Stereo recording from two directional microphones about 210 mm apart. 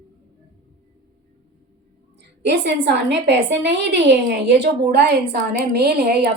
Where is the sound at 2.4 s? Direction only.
55° right (ahead or behind).